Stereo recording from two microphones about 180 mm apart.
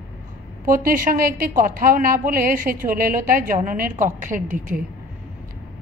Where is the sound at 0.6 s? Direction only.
50° right (ahead or behind).